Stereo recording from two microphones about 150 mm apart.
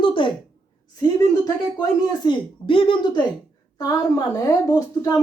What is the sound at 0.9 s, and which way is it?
Speech, 25° left (ahead or behind).